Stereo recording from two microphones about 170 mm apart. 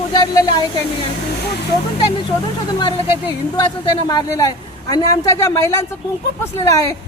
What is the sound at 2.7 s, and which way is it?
Speech, 25° left (ahead or behind).